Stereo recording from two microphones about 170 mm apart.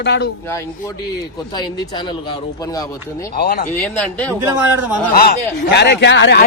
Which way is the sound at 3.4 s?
70° left (ahead or behind).